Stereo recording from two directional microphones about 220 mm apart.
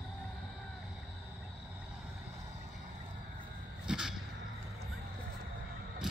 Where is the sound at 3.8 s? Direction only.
Centre (ahead or behind).